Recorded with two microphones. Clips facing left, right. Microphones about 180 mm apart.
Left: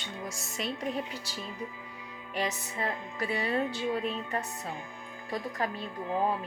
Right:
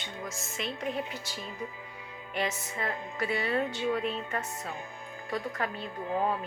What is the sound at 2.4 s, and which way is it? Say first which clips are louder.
Speech: even; 35° left (ahead or behind).